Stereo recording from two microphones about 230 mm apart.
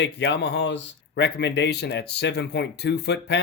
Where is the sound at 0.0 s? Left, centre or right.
Left.